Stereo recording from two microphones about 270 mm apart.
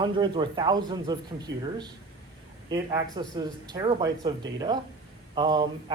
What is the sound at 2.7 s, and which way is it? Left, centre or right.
Speech, centre.